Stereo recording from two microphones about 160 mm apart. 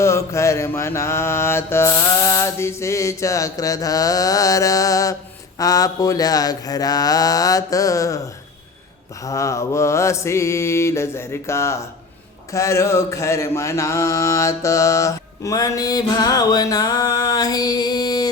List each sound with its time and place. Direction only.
0.0 s mantra: 15° left (ahead or behind)
9.2 s mantra: 20° left (ahead or behind)